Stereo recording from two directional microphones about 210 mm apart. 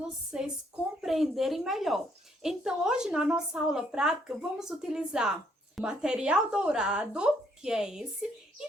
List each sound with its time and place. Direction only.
0.3 s a woman's voice: 5° right (ahead or behind)